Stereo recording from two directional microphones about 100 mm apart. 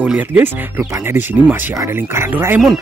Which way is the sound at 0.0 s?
15° right (ahead or behind).